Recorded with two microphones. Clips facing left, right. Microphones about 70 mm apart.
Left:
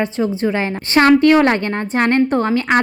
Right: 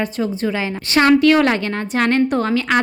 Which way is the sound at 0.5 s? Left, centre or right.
Left.